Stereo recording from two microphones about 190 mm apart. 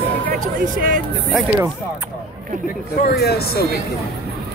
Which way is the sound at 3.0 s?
55° left (ahead or behind).